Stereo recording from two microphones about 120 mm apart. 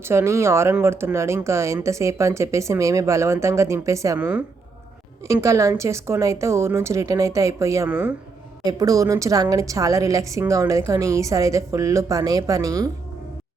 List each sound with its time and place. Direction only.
0.0 s a woman's voice: 20° right (ahead or behind)
4.2 s a woman's voice: 10° right (ahead or behind)
5.2 s a woman's voice: 25° right (ahead or behind)
7.9 s a woman's voice: 10° right (ahead or behind)
8.6 s a woman's voice: 30° right (ahead or behind)